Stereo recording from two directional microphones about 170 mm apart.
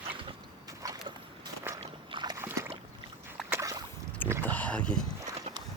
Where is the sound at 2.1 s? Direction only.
20° right (ahead or behind).